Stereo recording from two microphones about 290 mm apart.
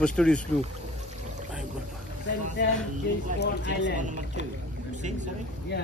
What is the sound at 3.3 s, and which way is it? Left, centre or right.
Speech, left.